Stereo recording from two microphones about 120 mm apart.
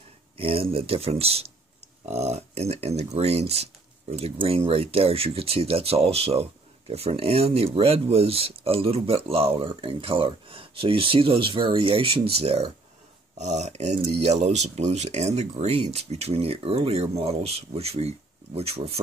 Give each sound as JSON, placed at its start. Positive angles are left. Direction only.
{"t": 0.4, "sound": "speech", "side_deg": -55}
{"t": 13.4, "sound": "speech", "side_deg": -70}